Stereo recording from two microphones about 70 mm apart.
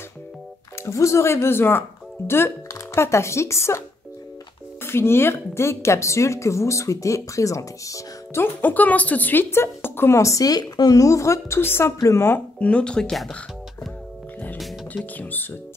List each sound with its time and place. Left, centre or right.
0.8 s a woman's voice: left
4.8 s a woman's voice: left
8.4 s speech: left
11.6 s speech: left
12.5 s speech: centre
15.1 s speech: left